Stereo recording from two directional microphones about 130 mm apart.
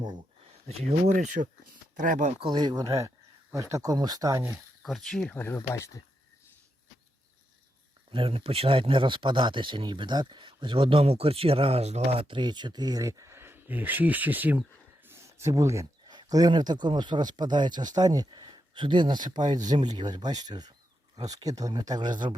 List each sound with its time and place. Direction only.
0.9 s speech: 65° right (ahead or behind)
2.4 s speech: 35° right (ahead or behind)
4.5 s speech: centre (ahead or behind)
5.5 s speech: 25° left (ahead or behind)
8.1 s speech: 45° right (ahead or behind); by 14.6 s 15° right (ahead or behind)
15.0 s a sound: 20° right (ahead or behind)
16.1 s speech: 30° right (ahead or behind)